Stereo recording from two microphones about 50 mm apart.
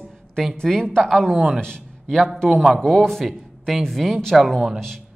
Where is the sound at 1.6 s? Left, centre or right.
Centre.